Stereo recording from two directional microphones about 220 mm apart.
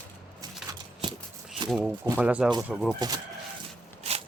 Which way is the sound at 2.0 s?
10° right (ahead or behind).